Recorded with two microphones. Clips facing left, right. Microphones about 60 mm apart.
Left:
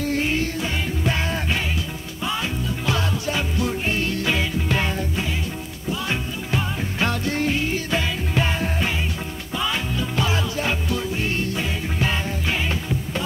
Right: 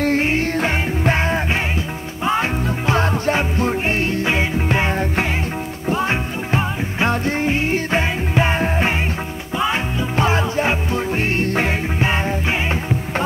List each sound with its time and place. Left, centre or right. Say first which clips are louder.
0.0 s music: right 5 dB; right
12.0 s music: right 4 dB; right